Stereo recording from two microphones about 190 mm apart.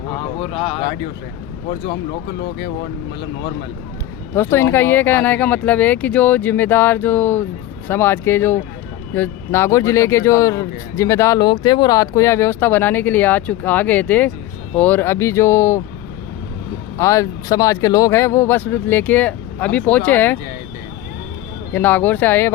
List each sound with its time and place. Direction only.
0.3 s speech: 30° left (ahead or behind)
2.4 s speech: 60° left (ahead or behind)
4.4 s speech: 10° left (ahead or behind)
17.0 s speech: 15° left (ahead or behind)
21.7 s speech: 10° left (ahead or behind)